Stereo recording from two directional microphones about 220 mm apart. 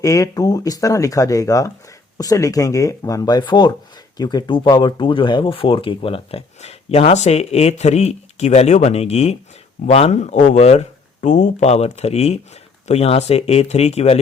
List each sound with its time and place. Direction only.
0.0 s speech: 15° left (ahead or behind)